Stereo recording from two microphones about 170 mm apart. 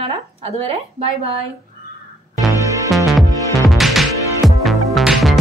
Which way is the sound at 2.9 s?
Centre (ahead or behind).